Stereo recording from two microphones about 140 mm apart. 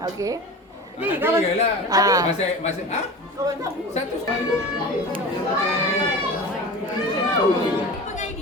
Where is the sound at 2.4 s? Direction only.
55° left (ahead or behind).